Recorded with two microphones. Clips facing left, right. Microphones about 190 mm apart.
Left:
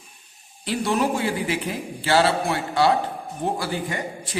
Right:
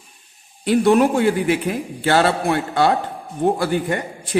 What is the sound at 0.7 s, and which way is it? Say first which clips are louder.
A man's voice: right 8 dB; 55° right (ahead or behind).